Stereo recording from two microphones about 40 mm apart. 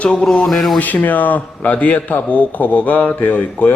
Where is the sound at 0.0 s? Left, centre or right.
Left.